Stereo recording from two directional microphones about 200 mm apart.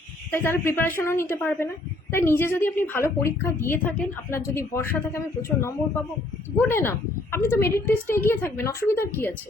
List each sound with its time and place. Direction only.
0.3 s a woman's voice: 10° left (ahead or behind)